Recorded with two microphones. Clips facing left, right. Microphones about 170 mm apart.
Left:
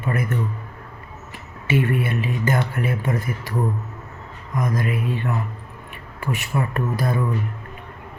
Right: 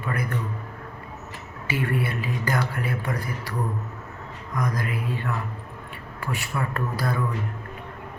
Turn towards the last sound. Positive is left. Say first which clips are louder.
# left 4 dB
turn(degrees=20)  # may be behind; listen again after turning